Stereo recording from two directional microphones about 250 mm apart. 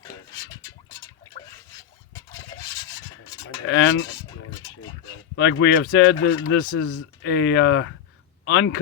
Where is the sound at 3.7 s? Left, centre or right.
Left.